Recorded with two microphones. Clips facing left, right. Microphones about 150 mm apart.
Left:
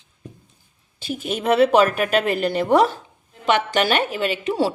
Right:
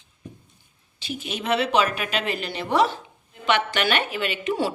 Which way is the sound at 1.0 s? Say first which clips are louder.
Left 5 dB; 45° left (ahead or behind).